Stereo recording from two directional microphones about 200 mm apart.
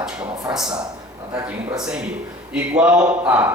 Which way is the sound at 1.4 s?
15° right (ahead or behind).